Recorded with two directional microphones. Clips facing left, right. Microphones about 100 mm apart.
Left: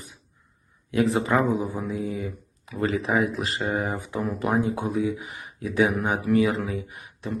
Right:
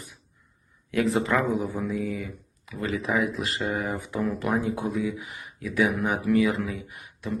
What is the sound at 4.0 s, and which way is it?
Speech, 20° left (ahead or behind).